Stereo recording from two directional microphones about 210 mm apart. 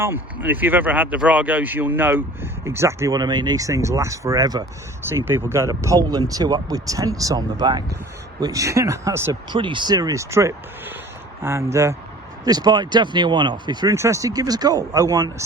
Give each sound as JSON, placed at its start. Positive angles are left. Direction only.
{"t": 0.0, "sound": "speech", "side_deg": -10}